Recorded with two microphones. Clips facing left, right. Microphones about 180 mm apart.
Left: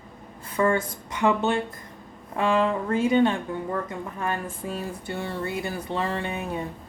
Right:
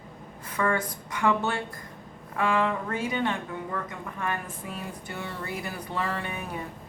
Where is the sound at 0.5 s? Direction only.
25° left (ahead or behind).